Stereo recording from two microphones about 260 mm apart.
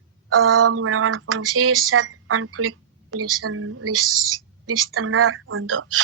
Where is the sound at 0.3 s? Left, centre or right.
Right.